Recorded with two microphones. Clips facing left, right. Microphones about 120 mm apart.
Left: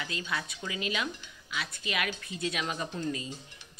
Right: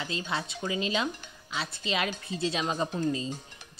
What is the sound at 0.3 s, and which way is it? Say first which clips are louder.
Speech: right 4 dB; 25° right (ahead or behind).